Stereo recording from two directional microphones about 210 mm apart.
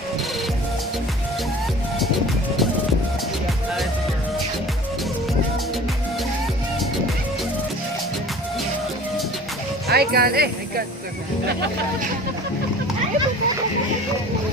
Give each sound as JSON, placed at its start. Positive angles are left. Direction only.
{"t": 9.8, "sound": "music", "side_deg": -50}